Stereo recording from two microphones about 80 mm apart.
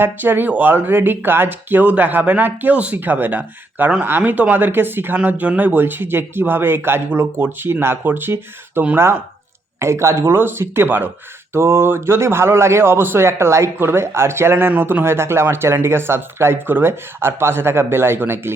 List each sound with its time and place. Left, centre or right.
0.0 s a man's voice: right